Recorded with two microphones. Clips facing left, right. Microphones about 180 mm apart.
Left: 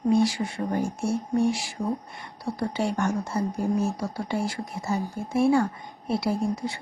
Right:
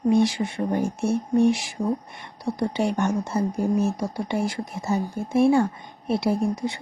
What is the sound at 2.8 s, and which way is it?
Speech, 20° right (ahead or behind).